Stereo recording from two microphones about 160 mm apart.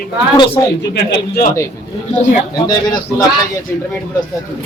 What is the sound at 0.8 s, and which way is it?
Speech, 80° left.